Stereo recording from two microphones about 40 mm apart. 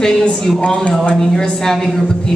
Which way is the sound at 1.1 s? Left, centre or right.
Centre.